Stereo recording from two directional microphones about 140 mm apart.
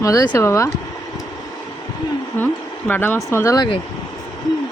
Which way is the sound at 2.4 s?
15° left (ahead or behind).